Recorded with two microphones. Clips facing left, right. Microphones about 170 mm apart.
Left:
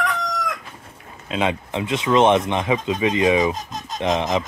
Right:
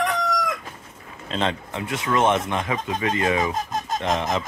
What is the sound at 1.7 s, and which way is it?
Speech, 20° left (ahead or behind).